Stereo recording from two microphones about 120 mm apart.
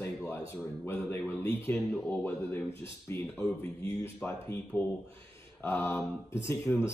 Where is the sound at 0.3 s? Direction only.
20° left (ahead or behind).